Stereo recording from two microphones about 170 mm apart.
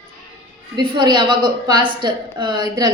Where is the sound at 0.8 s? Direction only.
25° right (ahead or behind).